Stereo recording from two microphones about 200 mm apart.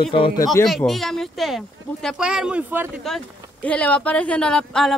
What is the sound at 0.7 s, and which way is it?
Speech, centre (ahead or behind).